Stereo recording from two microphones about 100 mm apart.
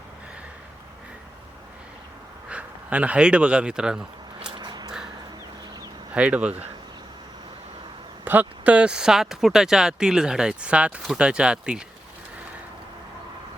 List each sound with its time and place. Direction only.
2.5 s speech: 10° right (ahead or behind)
4.5 s a sound: 45° right (ahead or behind)
6.1 s speech: 10° right (ahead or behind)
8.2 s speech: 15° right (ahead or behind)